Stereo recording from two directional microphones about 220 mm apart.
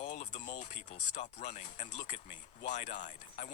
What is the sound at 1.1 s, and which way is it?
Speech, 35° left (ahead or behind).